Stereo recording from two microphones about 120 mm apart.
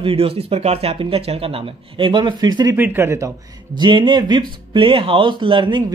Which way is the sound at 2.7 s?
20° right (ahead or behind).